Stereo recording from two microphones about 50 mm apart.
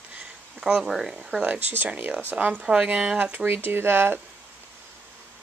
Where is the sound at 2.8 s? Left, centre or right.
Right.